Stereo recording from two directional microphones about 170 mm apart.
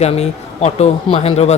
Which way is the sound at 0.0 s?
40° left (ahead or behind).